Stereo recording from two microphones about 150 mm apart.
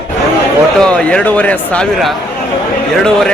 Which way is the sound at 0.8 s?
5° left (ahead or behind).